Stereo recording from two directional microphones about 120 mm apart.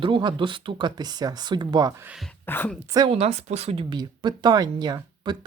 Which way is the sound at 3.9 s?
40° right (ahead or behind).